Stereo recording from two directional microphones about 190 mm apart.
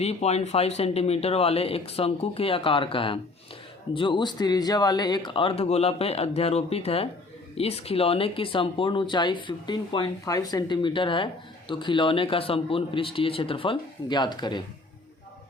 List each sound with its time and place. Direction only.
0.0 s speech: 35° left (ahead or behind)